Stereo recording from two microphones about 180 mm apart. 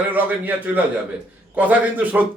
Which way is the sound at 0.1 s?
10° right (ahead or behind).